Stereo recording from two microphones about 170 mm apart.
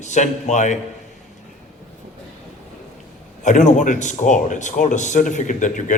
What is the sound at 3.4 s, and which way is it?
Speech, 45° left (ahead or behind).